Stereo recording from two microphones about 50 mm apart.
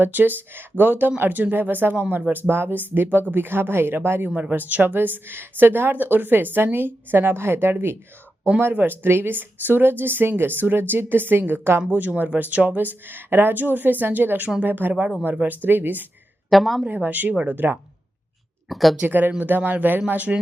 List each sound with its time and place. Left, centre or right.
0.0 s speech: right
2.3 s a woman's voice: right
11.9 s speech: right
16.5 s a woman's voice: centre
16.9 s speech: right
18.7 s a woman's voice: centre
19.0 s speech: right